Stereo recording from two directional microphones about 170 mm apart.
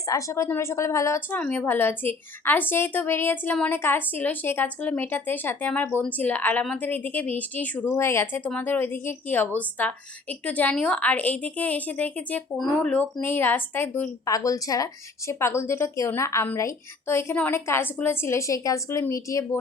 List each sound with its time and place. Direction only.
0.0 s speech: 20° left (ahead or behind)